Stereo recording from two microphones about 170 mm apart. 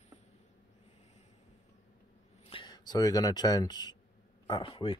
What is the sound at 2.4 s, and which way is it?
Speech, 30° left (ahead or behind).